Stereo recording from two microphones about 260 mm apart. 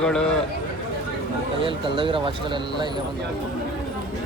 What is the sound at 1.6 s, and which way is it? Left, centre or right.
Speech, centre.